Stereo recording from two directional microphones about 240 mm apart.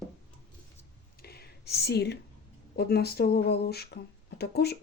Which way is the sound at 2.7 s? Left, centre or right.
Left.